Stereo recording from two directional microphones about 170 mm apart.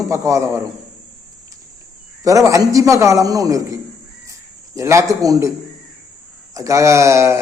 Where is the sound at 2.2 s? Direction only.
20° right (ahead or behind).